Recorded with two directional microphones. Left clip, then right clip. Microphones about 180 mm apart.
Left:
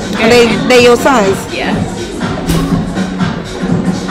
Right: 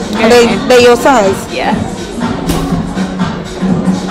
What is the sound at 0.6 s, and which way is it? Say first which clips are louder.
Speech: right 1 dB; 20° right (ahead or behind).